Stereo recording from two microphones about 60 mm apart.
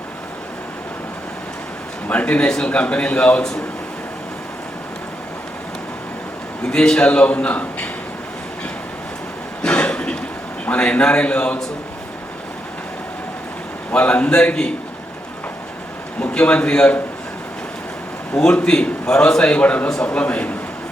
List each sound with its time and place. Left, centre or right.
2.0 s a man's voice: left
6.7 s a man's voice: centre
9.6 s cough: centre
10.7 s a man's voice: left
13.9 s a man's voice: left
16.2 s a man's voice: centre
18.3 s a man's voice: centre